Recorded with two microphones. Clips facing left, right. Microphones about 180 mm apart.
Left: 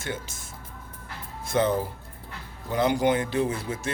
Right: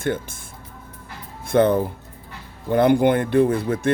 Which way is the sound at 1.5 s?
60° right (ahead or behind).